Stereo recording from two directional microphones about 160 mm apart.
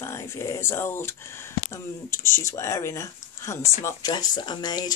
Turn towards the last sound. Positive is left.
turn(degrees=25)  # may be behind; listen again after turning